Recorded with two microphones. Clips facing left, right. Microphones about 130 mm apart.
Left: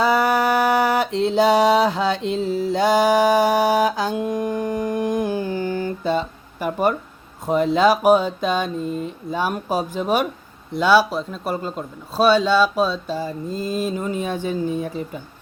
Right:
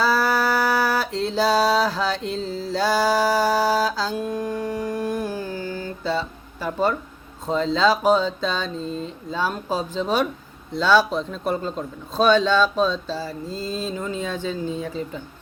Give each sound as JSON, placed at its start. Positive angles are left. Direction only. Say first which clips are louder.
{"t": 0.0, "sound": "mantra", "louder": "left 3 dB", "side_deg": 20}
{"t": 7.4, "sound": "speech", "louder": "left 3 dB", "side_deg": 15}